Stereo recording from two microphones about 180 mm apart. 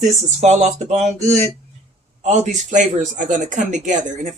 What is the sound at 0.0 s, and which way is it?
Speech, 40° right (ahead or behind).